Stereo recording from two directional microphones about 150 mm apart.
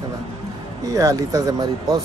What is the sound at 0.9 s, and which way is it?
Speech, 20° right (ahead or behind).